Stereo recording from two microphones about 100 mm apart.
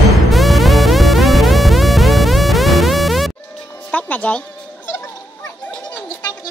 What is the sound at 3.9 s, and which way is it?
Music, 15° left (ahead or behind).